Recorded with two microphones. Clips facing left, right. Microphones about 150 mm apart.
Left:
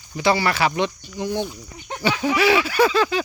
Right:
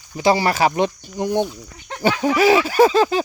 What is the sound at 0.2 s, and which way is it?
Speech, 40° right (ahead or behind).